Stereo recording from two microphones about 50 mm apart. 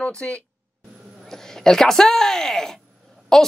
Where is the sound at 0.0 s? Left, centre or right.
Left.